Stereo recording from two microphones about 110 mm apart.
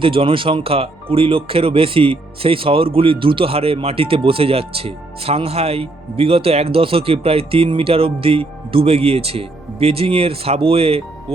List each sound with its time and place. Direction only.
0.0 s speech: 55° right (ahead or behind)